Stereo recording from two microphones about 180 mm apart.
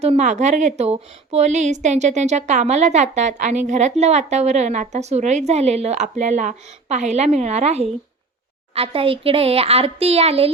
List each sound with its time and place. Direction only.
0.0 s speech: 40° right (ahead or behind)